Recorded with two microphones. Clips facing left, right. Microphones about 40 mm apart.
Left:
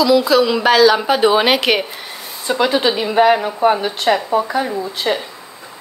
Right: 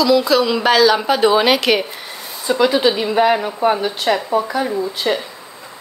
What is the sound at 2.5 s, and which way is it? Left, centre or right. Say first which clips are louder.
Speech: right 1 dB; left.